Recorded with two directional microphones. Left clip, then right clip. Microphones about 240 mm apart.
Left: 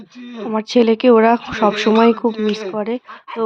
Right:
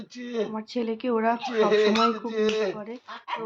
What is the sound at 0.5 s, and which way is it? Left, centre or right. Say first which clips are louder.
Speech: left 16 dB; left.